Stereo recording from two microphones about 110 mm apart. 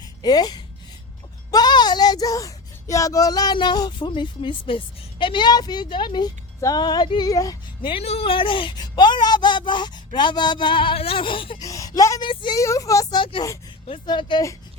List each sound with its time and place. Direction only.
0.2 s speech: 40° left (ahead or behind)
7.8 s speech: 55° left (ahead or behind)
11.6 s speech: 30° left (ahead or behind)
12.2 s speech: 45° left (ahead or behind)
12.5 s speech: 30° left (ahead or behind)
13.1 s speech: 50° left (ahead or behind)